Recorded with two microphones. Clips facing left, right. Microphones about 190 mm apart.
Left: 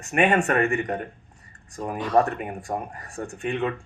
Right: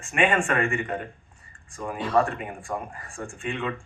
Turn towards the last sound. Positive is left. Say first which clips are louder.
# left 4 dB
turn(degrees=40)  # may be behind; listen again after turning